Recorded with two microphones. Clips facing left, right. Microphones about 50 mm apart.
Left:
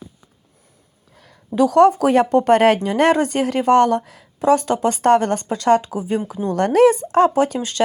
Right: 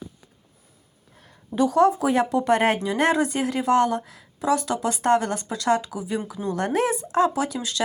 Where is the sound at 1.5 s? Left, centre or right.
Left.